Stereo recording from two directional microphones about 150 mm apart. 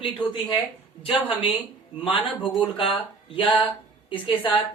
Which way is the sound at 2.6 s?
35° left (ahead or behind).